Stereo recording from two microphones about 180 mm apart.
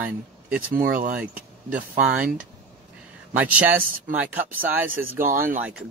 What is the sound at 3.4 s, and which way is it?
Speech, 10° right (ahead or behind).